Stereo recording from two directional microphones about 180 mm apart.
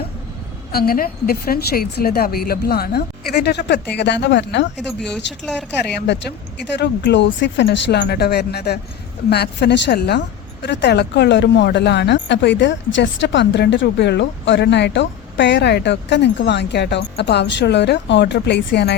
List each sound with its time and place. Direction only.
0.7 s a woman's voice: 55° left (ahead or behind); by 4.7 s 75° left (ahead or behind)
4.9 s speech: 5° left (ahead or behind)
5.9 s speech: 70° left (ahead or behind)